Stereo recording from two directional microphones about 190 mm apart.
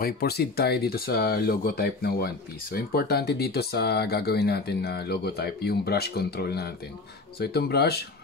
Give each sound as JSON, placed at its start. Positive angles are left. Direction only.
{"t": 0.0, "sound": "speech", "side_deg": 55}